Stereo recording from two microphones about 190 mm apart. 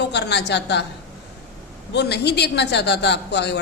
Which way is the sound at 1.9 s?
60° left (ahead or behind).